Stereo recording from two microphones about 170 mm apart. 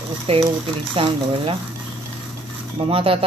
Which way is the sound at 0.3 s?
35° right (ahead or behind).